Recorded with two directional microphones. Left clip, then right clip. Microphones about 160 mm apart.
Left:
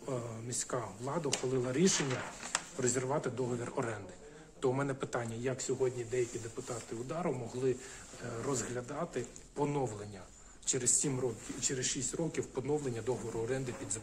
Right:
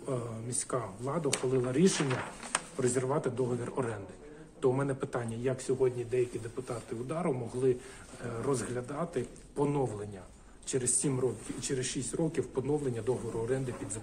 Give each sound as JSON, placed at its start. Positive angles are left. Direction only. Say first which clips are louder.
{"t": 0.1, "sound": "speech", "louder": "right 3 dB", "side_deg": 25}
{"t": 3.7, "sound": "a man's voice", "louder": "right 2 dB", "side_deg": 35}